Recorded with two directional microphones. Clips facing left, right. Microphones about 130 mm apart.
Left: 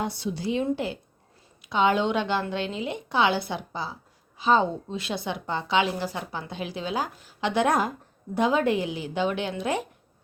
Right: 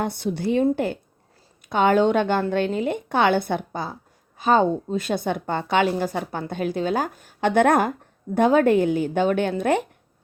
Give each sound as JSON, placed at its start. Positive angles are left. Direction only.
{"t": 0.0, "sound": "a woman's voice", "side_deg": -55}